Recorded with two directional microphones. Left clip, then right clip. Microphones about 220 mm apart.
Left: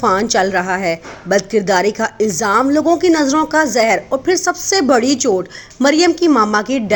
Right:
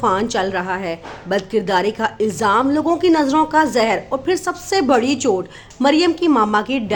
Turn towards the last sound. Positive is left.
turn(degrees=10)  # may be behind; listen again after turning